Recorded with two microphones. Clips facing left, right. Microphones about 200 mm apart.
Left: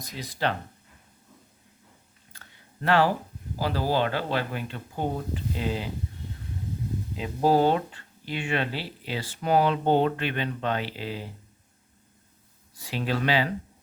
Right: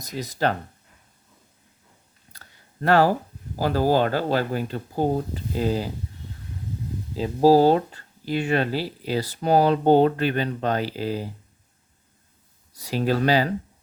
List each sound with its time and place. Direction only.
0.0 s speech: 40° right (ahead or behind)
2.3 s a sound: 40° right (ahead or behind)
3.6 s speech: 45° right (ahead or behind)
7.2 s speech: 35° right (ahead or behind)
12.7 s speech: 40° right (ahead or behind)